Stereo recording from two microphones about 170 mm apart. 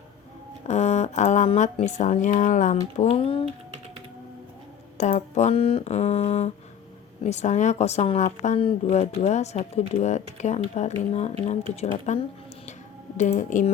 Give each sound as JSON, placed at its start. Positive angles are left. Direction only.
{"t": 0.7, "sound": "speech", "side_deg": 40}
{"t": 4.9, "sound": "a woman's voice", "side_deg": 45}